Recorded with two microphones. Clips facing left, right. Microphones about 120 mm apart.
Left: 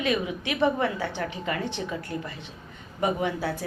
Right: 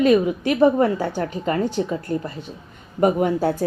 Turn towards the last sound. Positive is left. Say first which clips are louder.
# right 8 dB
turn(degrees=-45)  # may be behind; listen again after turning